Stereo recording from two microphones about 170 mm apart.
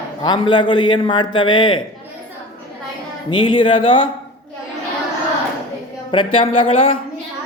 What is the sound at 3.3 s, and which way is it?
Speech, 30° left (ahead or behind).